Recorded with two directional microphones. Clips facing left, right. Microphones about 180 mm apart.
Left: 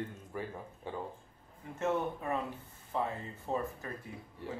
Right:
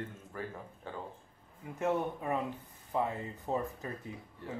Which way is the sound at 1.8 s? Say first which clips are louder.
Right 1 dB; 15° right (ahead or behind).